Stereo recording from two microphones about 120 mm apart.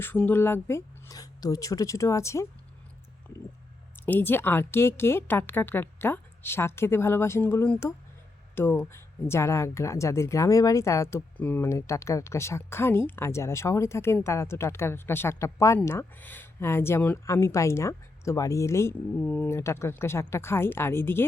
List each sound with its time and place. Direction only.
0.0 s speech: 15° left (ahead or behind)
3.9 s speech: 15° left (ahead or behind)